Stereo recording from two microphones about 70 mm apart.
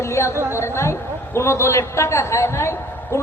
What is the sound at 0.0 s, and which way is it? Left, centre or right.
A man's voice, left.